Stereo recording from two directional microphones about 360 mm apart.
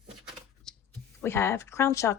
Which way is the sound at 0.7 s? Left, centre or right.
Centre.